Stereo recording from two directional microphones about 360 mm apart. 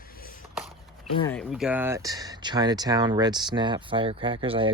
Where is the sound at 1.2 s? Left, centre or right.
Centre.